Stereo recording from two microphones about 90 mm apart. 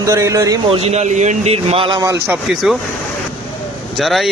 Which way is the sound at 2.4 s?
Centre (ahead or behind).